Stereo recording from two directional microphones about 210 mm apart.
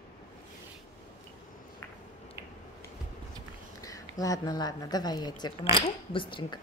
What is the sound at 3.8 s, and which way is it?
Speech, 15° left (ahead or behind).